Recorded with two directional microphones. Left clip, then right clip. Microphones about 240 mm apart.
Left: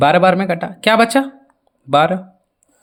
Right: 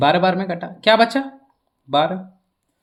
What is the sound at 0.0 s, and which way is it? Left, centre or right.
Speech, left.